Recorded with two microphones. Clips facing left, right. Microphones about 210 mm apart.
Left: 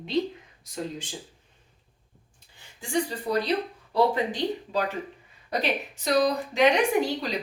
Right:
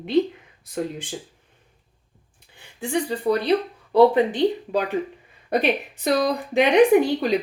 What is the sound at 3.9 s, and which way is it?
A woman's voice, 60° right (ahead or behind).